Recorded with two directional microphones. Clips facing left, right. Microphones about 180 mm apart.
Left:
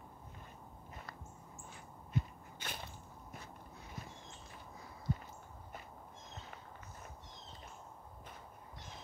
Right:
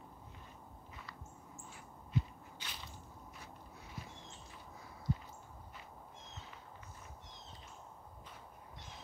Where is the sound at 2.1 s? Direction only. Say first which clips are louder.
Right 1 dB; 50° left (ahead or behind).